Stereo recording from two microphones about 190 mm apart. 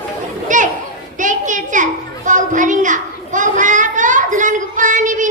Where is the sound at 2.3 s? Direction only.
40° right (ahead or behind).